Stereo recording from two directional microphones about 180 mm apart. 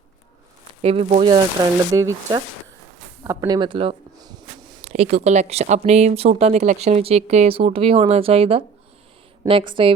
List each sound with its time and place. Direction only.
0.8 s speech: 35° right (ahead or behind)
1.9 s speech: 20° right (ahead or behind)
4.8 s speech: 35° right (ahead or behind)